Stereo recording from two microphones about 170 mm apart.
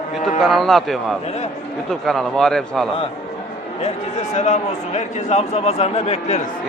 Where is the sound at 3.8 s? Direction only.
40° left (ahead or behind).